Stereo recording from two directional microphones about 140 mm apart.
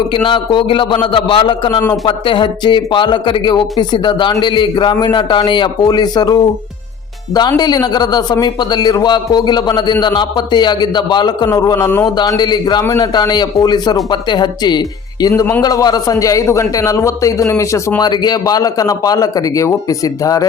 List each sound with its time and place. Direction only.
0.1 s a man's voice: 35° left (ahead or behind); by 12.1 s 20° left (ahead or behind)
12.1 s speech: 30° left (ahead or behind)
15.3 s a man's voice: 20° left (ahead or behind)
15.6 s a man's voice: 30° left (ahead or behind)